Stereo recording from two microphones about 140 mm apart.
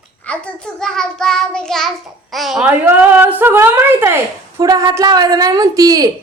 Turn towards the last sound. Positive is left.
turn(degrees=-25)  # may be behind; listen again after turning